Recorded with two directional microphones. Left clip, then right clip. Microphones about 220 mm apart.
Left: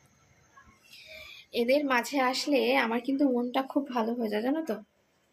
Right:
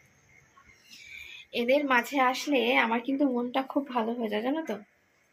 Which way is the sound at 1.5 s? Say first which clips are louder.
Right 1 dB; 5° left (ahead or behind).